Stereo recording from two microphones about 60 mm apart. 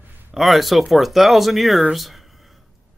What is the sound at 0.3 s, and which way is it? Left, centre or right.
Speech, centre.